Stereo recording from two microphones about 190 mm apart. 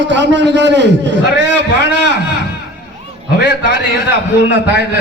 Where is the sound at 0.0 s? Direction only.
70° right (ahead or behind).